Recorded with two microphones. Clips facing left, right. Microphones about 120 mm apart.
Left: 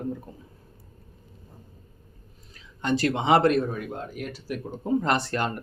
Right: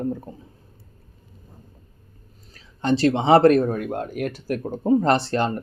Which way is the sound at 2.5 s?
30° right (ahead or behind).